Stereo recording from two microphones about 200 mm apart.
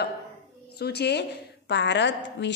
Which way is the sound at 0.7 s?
55° left (ahead or behind).